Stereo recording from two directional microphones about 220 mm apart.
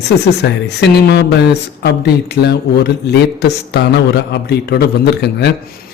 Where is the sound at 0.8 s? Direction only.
50° left (ahead or behind).